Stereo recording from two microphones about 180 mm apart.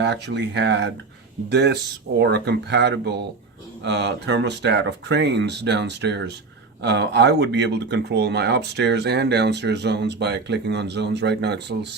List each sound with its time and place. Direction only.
0.0 s speech: 75° right (ahead or behind)